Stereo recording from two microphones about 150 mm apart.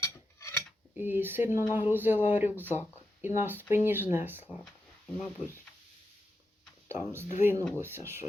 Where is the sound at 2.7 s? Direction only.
15° right (ahead or behind).